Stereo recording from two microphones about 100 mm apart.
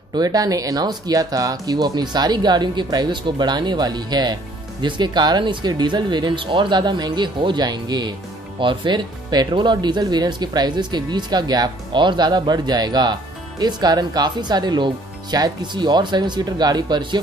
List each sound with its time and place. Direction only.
0.1 s speech: 40° right (ahead or behind)